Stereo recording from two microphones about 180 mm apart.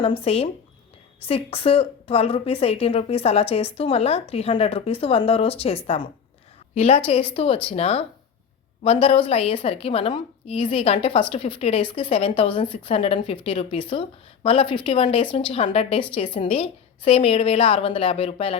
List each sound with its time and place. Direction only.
0.0 s a woman's voice: 30° left (ahead or behind)